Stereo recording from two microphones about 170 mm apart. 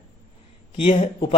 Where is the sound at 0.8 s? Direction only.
35° left (ahead or behind).